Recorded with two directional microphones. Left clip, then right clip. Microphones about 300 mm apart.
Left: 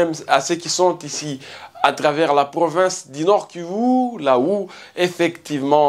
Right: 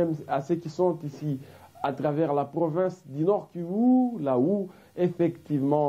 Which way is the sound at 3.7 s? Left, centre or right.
Centre.